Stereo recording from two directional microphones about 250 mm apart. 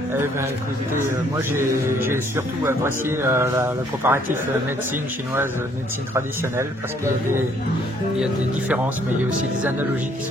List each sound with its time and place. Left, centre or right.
1.5 s speech: centre
8.2 s speech: centre